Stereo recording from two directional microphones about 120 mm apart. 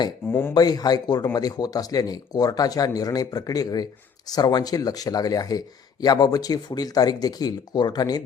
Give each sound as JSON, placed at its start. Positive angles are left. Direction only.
{"t": 0.3, "sound": "speech", "side_deg": 20}
{"t": 0.5, "sound": "speech", "side_deg": 35}